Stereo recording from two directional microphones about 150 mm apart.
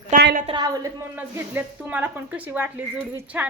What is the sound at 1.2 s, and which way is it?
A woman's voice, 15° right (ahead or behind).